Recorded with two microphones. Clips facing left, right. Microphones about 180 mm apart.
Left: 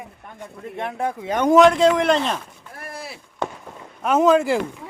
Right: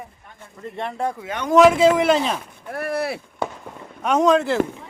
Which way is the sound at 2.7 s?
70° right (ahead or behind).